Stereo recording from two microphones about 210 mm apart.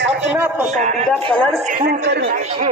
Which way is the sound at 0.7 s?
35° right (ahead or behind).